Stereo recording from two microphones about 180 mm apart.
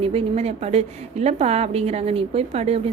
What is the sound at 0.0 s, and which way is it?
A woman's voice, 30° right (ahead or behind).